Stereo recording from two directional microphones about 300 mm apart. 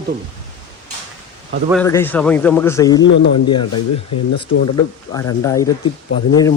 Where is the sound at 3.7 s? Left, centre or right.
Left.